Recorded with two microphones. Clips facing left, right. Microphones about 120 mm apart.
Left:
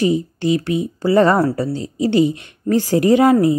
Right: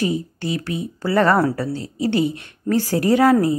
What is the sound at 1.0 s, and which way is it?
Speech, 15° left (ahead or behind).